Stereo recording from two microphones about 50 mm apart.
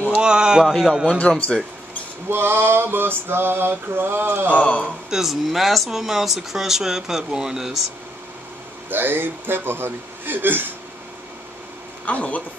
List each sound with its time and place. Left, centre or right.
0.2 s speech: centre
1.0 s speech: left
2.2 s male singing: right
4.5 s speech: left
5.1 s speech: centre
8.9 s male singing: right
12.1 s speech: left